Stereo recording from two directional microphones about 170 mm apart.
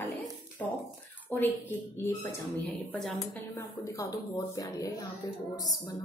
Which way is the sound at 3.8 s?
20° left (ahead or behind).